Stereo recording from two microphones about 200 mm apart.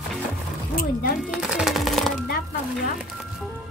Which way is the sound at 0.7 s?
45° left (ahead or behind).